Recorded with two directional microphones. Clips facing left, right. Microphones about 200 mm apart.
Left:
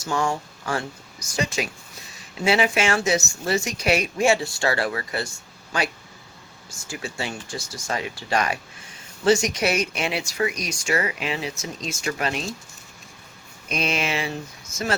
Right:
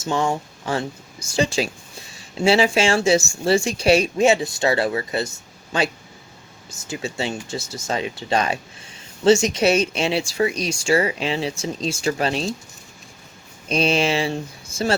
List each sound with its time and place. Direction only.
0.0 s speech: 25° right (ahead or behind)
13.7 s speech: 30° right (ahead or behind)